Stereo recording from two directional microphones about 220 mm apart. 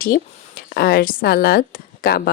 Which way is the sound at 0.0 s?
40° left (ahead or behind).